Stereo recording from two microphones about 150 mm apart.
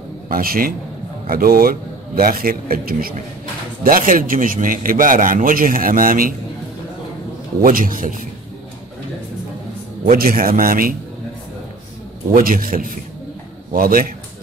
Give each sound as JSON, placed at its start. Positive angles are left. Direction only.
{"t": 0.3, "sound": "a man's voice", "side_deg": -75}
{"t": 3.8, "sound": "a man's voice", "side_deg": -65}
{"t": 7.6, "sound": "a man's voice", "side_deg": -65}
{"t": 10.1, "sound": "a man's voice", "side_deg": -75}
{"t": 12.3, "sound": "a man's voice", "side_deg": -70}